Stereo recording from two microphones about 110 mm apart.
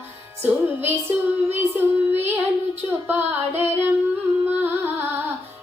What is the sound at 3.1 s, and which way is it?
Female singing, 20° right (ahead or behind).